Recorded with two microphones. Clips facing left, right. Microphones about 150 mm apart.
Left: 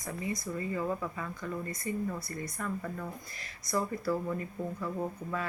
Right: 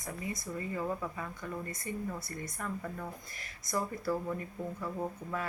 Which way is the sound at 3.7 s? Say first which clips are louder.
Left 2 dB; 15° right (ahead or behind).